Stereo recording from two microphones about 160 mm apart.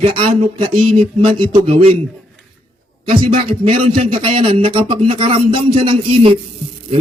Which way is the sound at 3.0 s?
35° right (ahead or behind).